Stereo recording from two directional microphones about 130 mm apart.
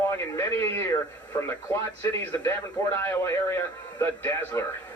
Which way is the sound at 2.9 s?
15° left (ahead or behind).